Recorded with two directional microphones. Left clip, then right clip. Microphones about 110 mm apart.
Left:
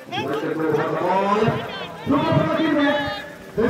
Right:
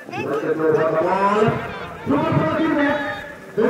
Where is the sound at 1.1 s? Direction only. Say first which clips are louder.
Left 2 dB; 25° right (ahead or behind).